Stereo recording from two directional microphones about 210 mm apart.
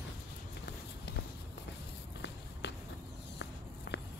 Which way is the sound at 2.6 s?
55° left (ahead or behind).